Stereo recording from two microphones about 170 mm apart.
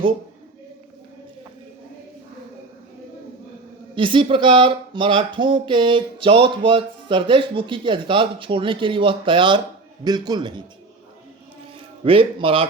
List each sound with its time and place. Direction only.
3.9 s speech: 30° right (ahead or behind)
12.0 s speech: 30° right (ahead or behind)